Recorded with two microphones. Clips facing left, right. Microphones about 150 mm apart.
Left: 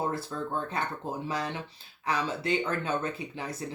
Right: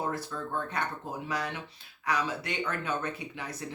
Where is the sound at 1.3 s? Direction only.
30° left (ahead or behind).